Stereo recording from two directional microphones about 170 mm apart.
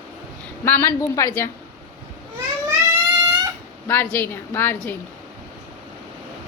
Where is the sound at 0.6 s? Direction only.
15° left (ahead or behind).